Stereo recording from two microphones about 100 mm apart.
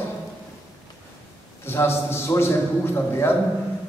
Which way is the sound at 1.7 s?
25° left (ahead or behind).